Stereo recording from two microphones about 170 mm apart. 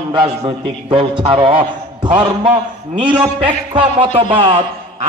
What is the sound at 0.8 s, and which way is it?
Speech, 30° right (ahead or behind).